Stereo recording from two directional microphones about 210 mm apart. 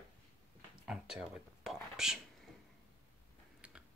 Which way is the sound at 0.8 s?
5° right (ahead or behind).